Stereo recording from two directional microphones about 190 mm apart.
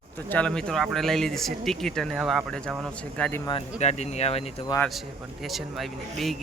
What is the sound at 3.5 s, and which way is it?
Speech, 30° left (ahead or behind).